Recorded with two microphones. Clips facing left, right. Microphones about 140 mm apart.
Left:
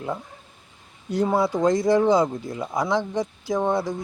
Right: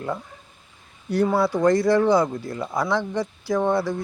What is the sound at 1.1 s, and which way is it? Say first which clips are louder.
Speech: right 1 dB; 20° left (ahead or behind).